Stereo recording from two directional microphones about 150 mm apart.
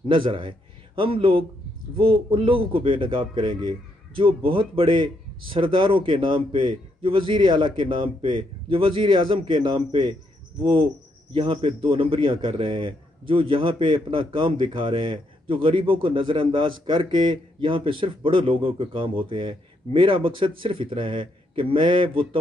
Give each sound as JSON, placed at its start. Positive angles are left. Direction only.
{"t": 0.1, "sound": "a man's voice", "side_deg": -35}